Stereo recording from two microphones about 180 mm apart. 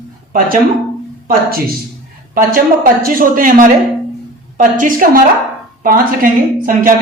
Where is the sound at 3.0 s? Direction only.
50° right (ahead or behind).